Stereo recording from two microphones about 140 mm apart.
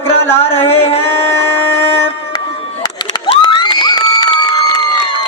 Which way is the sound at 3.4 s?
30° left (ahead or behind).